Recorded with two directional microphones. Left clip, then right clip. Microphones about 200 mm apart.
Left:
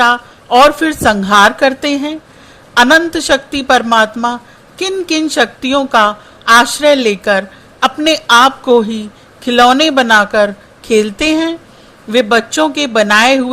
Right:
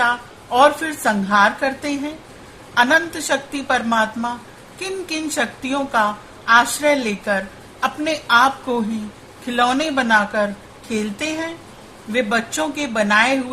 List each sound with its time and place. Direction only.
0.0 s a woman's voice: 30° left (ahead or behind)